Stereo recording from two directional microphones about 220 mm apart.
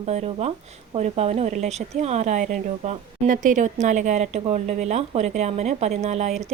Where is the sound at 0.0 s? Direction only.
30° right (ahead or behind).